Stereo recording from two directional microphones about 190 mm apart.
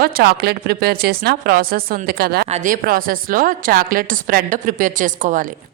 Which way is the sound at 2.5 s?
45° right (ahead or behind).